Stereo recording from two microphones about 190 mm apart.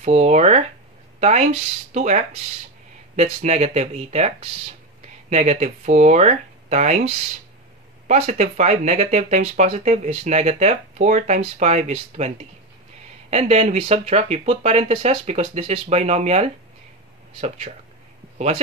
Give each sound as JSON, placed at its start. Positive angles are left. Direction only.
{"t": 0.0, "sound": "speech", "side_deg": -35}
{"t": 8.1, "sound": "speech", "side_deg": -35}